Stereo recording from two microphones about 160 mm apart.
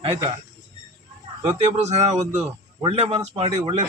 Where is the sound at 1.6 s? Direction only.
45° right (ahead or behind).